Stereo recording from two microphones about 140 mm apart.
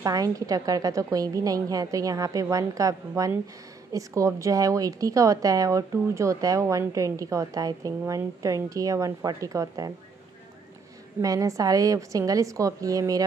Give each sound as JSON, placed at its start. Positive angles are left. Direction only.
{"t": 0.0, "sound": "a woman's voice", "side_deg": -25}
{"t": 11.1, "sound": "a woman's voice", "side_deg": -25}